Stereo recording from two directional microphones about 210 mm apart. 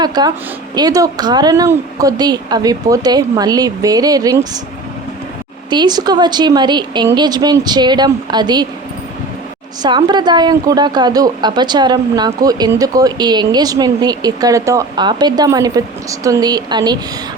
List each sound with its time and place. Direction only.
0.0 s a woman's voice: 20° right (ahead or behind)
5.7 s a woman's voice: 20° right (ahead or behind)
9.8 s a woman's voice: 20° right (ahead or behind)